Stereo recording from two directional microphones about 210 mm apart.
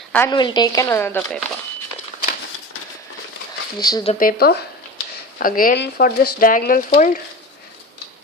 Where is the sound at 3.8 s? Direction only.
20° left (ahead or behind).